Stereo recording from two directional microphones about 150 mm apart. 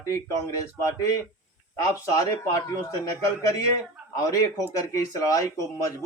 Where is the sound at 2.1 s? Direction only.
25° left (ahead or behind).